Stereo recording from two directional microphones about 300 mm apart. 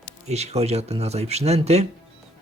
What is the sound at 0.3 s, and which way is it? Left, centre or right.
Speech, right.